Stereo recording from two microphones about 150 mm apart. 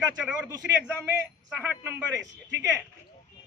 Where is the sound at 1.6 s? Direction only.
15° right (ahead or behind).